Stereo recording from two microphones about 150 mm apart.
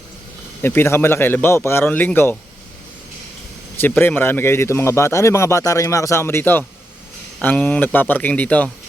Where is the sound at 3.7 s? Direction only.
15° left (ahead or behind).